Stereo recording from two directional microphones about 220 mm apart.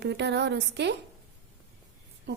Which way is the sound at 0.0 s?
50° right (ahead or behind).